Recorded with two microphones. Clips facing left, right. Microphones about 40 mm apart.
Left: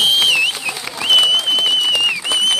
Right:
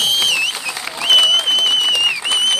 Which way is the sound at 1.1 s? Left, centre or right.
Centre.